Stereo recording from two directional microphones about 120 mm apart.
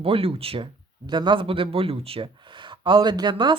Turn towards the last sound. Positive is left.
turn(degrees=-40)  # may be behind; listen again after turning